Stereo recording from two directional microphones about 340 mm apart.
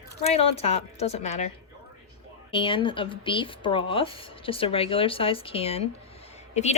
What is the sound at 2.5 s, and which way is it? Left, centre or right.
Speech, centre.